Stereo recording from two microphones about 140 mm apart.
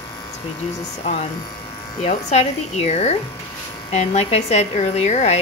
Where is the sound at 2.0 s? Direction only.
55° left (ahead or behind).